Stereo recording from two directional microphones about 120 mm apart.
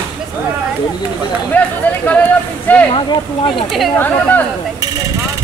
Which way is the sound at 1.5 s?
10° left (ahead or behind).